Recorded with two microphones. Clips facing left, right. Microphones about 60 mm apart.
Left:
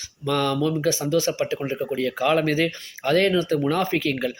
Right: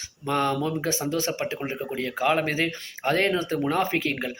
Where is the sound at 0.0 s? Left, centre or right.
Right.